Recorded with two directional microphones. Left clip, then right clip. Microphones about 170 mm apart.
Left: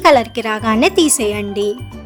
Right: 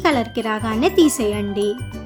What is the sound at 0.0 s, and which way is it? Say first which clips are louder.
Speech: left 8 dB; 40° left (ahead or behind).